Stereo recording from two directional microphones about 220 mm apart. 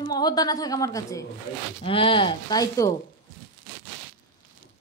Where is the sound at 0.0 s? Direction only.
20° left (ahead or behind).